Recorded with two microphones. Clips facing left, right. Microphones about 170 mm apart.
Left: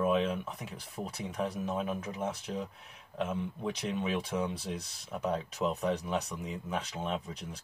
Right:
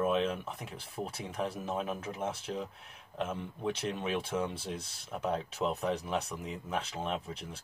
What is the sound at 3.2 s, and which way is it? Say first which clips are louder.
Speech: right 1 dB; centre (ahead or behind).